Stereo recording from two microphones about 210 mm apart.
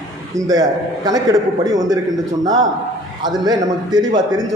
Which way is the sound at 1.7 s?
15° right (ahead or behind).